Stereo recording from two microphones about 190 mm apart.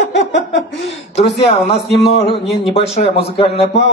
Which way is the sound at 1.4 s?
60° left (ahead or behind).